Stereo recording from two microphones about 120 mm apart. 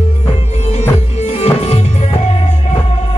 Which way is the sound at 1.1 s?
65° left (ahead or behind).